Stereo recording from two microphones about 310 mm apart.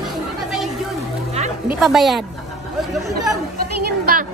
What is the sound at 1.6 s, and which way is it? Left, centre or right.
Speech, centre.